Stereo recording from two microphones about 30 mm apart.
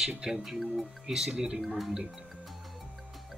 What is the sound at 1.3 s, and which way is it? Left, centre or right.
Speech, right.